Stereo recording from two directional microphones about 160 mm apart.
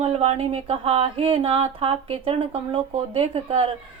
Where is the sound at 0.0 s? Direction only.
40° right (ahead or behind).